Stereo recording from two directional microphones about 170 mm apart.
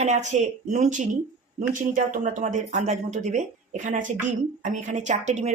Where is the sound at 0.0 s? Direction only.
40° right (ahead or behind).